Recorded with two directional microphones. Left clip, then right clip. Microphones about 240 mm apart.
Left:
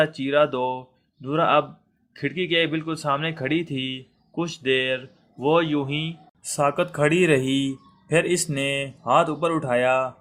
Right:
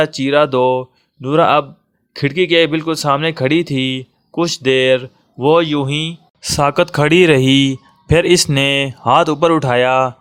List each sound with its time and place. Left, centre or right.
0.0 s speech: right